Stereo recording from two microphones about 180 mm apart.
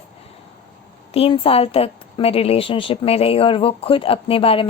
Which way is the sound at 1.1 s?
30° left (ahead or behind).